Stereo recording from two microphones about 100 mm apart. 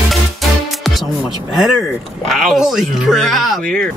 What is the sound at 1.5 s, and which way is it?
Speech, 5° right (ahead or behind).